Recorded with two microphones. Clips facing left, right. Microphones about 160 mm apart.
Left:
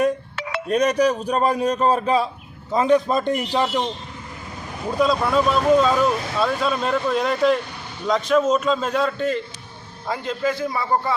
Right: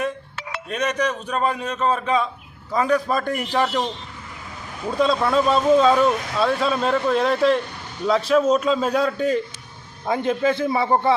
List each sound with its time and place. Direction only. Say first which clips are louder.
0.7 s a man's voice: left 5 dB; 35° left (ahead or behind)
2.7 s a man's voice: left 3 dB; 25° left (ahead or behind)
4.9 s a man's voice: even; centre (ahead or behind)
10.1 s a man's voice: right 4 dB; 25° right (ahead or behind)